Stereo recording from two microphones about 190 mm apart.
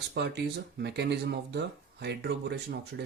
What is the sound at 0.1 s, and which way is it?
Speech, 65° right (ahead or behind).